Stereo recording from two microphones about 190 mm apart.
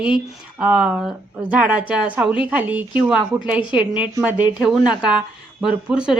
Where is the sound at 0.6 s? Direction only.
5° right (ahead or behind).